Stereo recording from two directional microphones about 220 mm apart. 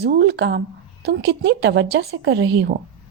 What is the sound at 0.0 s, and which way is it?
A woman's voice, 50° right (ahead or behind).